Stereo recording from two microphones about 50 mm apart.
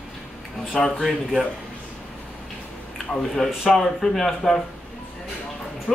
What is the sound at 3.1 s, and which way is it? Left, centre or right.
Speech, centre.